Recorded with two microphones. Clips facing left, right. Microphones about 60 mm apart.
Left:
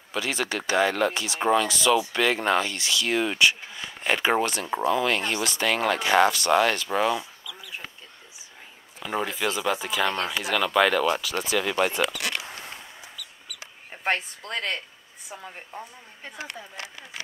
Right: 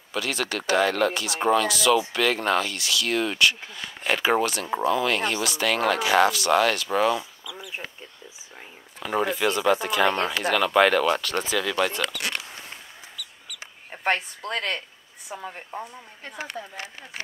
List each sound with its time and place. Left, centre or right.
0.1 s speech: centre
7.5 s duck: right
9.0 s speech: centre
11.6 s speech: centre
14.0 s speech: centre
16.7 s speech: right